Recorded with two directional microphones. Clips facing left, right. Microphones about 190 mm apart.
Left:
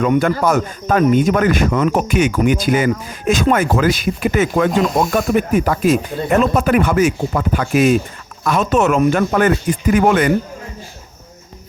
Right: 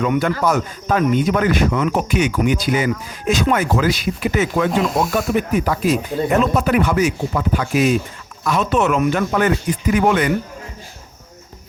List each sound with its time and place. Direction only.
0.1 s speech: 50° left (ahead or behind)